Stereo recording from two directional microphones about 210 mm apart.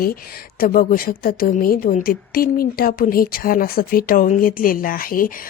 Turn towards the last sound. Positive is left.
turn(degrees=45)  # may be behind; listen again after turning